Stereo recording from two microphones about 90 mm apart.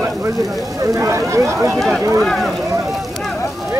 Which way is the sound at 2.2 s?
5° left (ahead or behind).